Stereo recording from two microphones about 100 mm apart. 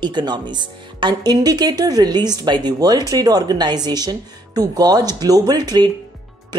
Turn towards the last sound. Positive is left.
turn(degrees=-45)  # may be behind; listen again after turning